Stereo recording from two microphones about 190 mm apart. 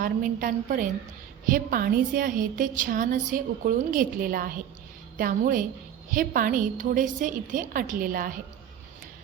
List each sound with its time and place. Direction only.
0.0 s a woman's voice: 45° right (ahead or behind)